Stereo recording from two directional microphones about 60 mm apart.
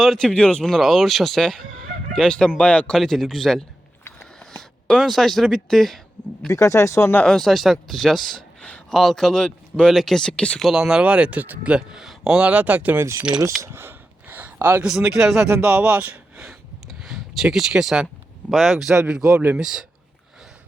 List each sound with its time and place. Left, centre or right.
0.0 s speech: centre
0.3 s speech: centre
0.6 s speech: centre
3.0 s speech: centre
6.5 s speech: left
7.3 s speech: centre
10.2 s speech: centre
10.7 s speech: centre; by 11.7 s right
11.7 s speech: centre
13.0 s speech: right
14.3 s a sound: right
14.8 s speech: centre
15.4 s speech: right
17.0 s speech: centre